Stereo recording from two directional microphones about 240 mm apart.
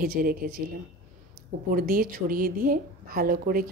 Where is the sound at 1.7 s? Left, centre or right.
Right.